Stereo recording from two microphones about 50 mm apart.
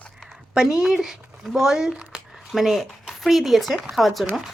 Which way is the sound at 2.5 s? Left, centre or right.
Centre.